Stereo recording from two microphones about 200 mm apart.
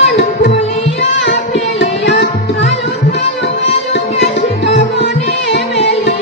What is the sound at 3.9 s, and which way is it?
Music, 60° left (ahead or behind).